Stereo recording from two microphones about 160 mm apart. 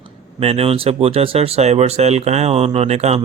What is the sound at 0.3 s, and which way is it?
Speech, 35° right (ahead or behind).